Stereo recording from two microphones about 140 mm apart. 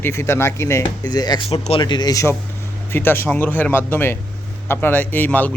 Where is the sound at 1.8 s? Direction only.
30° left (ahead or behind).